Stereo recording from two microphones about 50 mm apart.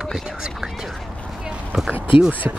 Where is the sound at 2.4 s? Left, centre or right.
Right.